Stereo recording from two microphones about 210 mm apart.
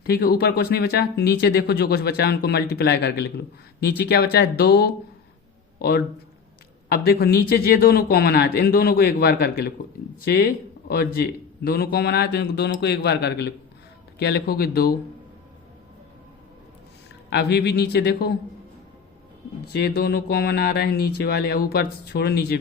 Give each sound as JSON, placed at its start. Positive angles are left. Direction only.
{"t": 0.0, "sound": "speech", "side_deg": 45}
{"t": 6.8, "sound": "speech", "side_deg": 45}
{"t": 17.2, "sound": "speech", "side_deg": 50}
{"t": 19.6, "sound": "speech", "side_deg": 50}